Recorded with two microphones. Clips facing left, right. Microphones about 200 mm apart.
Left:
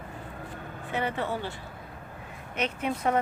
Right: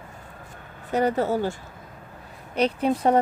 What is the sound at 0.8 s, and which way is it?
Speech, 40° right (ahead or behind).